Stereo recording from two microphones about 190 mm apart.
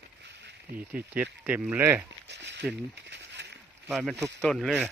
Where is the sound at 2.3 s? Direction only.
65° right (ahead or behind).